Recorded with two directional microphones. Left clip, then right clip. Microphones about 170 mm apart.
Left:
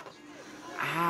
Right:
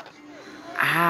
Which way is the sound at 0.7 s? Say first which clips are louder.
Right 10 dB; 35° right (ahead or behind).